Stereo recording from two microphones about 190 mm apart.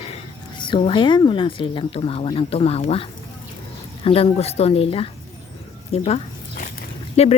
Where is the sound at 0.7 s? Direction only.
25° left (ahead or behind).